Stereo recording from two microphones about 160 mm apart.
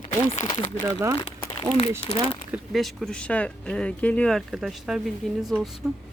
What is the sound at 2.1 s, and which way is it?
Speech, 40° left (ahead or behind).